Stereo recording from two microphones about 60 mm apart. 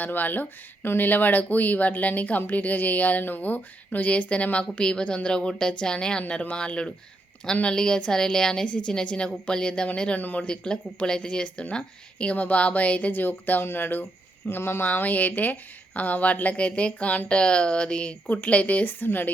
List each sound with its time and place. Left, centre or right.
0.0 s a woman's voice: left
10.4 s a woman's voice: centre; by 14.8 s left
14.8 s a woman's voice: left
18.3 s a woman's voice: left